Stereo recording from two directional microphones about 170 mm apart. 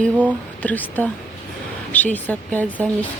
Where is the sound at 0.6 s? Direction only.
10° left (ahead or behind).